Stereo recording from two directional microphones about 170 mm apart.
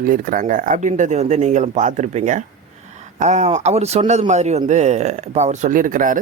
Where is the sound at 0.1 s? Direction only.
55° right (ahead or behind).